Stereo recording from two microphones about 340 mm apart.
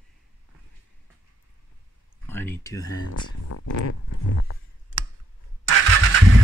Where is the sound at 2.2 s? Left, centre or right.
Centre.